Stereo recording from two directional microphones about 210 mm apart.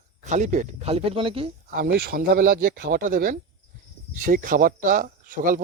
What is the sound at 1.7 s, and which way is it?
Speech, 50° right (ahead or behind).